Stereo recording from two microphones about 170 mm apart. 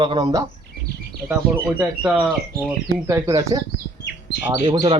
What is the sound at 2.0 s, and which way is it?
A man's voice, 10° right (ahead or behind).